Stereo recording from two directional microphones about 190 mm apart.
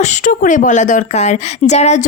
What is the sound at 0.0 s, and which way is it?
A woman's voice, 40° left (ahead or behind).